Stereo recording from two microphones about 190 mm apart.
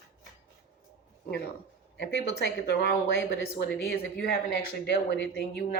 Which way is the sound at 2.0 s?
65° left (ahead or behind).